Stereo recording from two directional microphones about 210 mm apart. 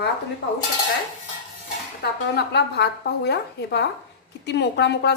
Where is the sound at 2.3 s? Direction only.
55° left (ahead or behind).